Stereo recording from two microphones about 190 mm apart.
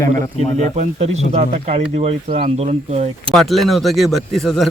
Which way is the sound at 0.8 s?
35° right (ahead or behind).